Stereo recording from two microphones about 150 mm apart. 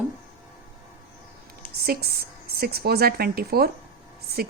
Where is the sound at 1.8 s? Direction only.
90° right.